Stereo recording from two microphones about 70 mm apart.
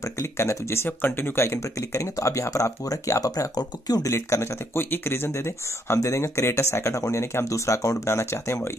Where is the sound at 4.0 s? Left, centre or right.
Left.